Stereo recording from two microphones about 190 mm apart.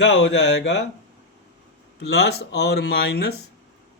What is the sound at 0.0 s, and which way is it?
Speech, 65° left (ahead or behind).